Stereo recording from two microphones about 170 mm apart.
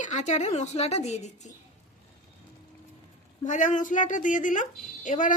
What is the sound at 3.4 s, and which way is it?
Speech, 45° left (ahead or behind).